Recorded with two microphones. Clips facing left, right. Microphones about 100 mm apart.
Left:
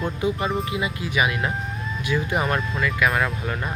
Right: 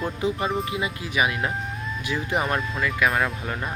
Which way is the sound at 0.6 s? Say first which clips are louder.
Left 2 dB; 30° right (ahead or behind).